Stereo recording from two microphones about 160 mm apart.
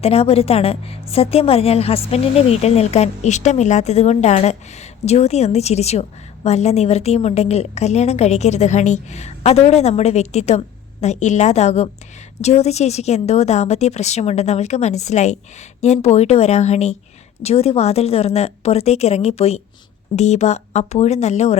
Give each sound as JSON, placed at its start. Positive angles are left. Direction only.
{"t": 0.0, "sound": "a woman's voice", "side_deg": 40}